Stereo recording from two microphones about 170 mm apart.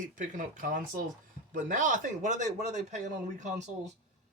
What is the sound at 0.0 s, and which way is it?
Speech, 50° right (ahead or behind).